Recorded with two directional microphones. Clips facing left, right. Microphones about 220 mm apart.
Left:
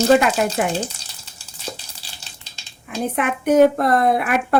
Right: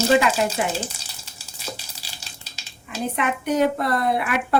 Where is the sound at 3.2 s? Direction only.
50° left (ahead or behind).